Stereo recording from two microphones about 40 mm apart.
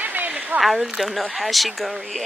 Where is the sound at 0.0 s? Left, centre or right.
Right.